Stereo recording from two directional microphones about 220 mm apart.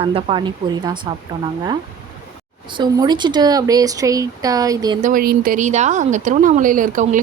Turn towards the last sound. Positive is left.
turn(degrees=-35)  # may be behind; listen again after turning